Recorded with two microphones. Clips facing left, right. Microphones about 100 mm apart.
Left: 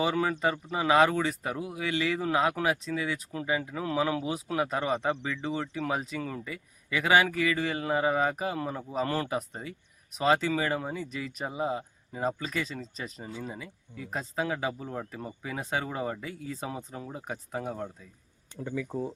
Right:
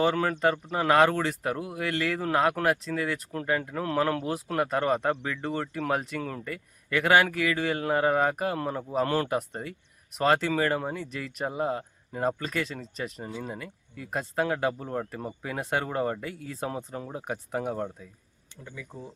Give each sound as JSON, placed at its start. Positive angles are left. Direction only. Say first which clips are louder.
{"t": 0.0, "sound": "speech", "louder": "right 3 dB", "side_deg": 5}
{"t": 18.9, "sound": "speech", "louder": "left 9 dB", "side_deg": 35}